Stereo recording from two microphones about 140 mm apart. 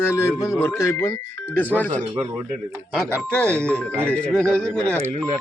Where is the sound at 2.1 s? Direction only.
30° right (ahead or behind).